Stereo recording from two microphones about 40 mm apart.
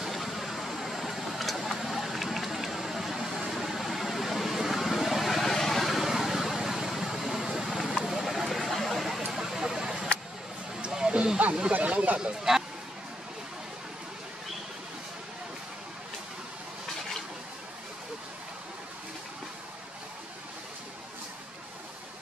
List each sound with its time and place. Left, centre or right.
0.1 s vehicle: centre
10.8 s a sound: right
11.4 s snake: right
11.7 s speech: right
12.5 s speech: centre